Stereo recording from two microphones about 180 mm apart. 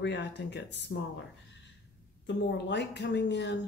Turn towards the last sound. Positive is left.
turn(degrees=75)  # may be behind; listen again after turning